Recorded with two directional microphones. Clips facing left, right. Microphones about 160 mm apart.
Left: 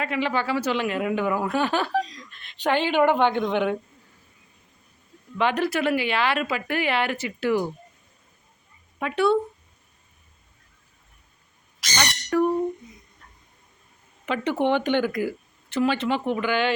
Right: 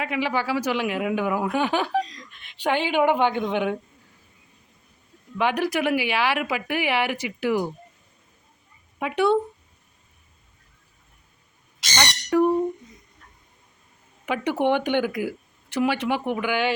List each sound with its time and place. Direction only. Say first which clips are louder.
0.0 s speech: even; 10° right (ahead or behind)
2.0 s speech: even; centre (ahead or behind)
2.3 s speech: left 1 dB; 10° right (ahead or behind)
5.4 s speech: even; 10° right (ahead or behind)
9.0 s speech: even; 15° right (ahead or behind)
12.3 s a sound: right 2 dB; 15° right (ahead or behind)
14.3 s speech: right 1 dB; 10° right (ahead or behind)